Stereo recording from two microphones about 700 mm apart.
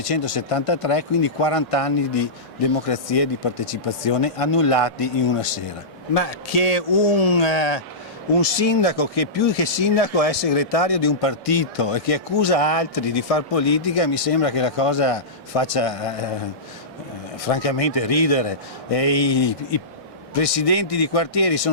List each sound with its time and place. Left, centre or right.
0.1 s speech: left
6.1 s a man's voice: left
17.4 s speech: left